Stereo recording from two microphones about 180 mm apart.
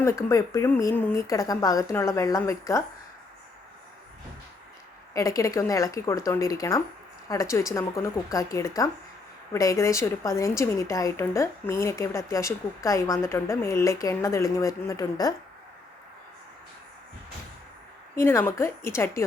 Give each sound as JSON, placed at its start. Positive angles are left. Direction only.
{"t": 0.0, "sound": "a woman's voice", "side_deg": 15}
{"t": 5.1, "sound": "a woman's voice", "side_deg": 20}
{"t": 18.1, "sound": "a woman's voice", "side_deg": 15}